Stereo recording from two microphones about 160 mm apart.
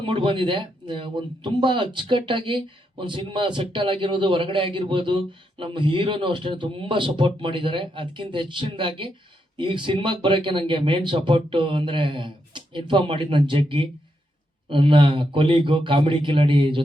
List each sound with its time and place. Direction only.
0.0 s speech: 30° right (ahead or behind)